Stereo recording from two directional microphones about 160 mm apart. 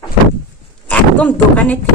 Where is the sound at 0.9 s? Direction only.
10° left (ahead or behind).